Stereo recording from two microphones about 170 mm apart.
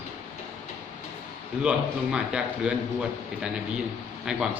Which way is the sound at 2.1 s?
5° right (ahead or behind).